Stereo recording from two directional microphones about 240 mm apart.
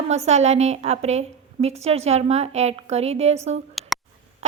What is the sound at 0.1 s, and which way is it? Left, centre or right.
A woman's voice, right.